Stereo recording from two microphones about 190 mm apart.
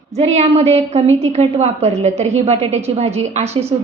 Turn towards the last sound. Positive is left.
turn(degrees=-35)  # may be behind; listen again after turning